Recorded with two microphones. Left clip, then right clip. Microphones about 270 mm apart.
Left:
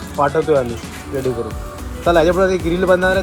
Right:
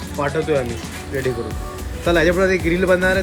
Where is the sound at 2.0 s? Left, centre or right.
Centre.